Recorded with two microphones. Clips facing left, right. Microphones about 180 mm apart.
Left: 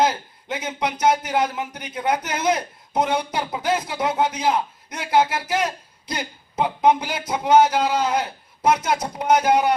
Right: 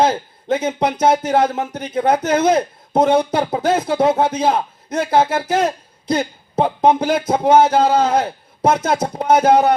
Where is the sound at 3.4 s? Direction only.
45° right (ahead or behind).